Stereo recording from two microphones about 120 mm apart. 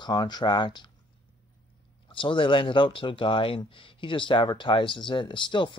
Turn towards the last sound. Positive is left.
turn(degrees=40)  # may be behind; listen again after turning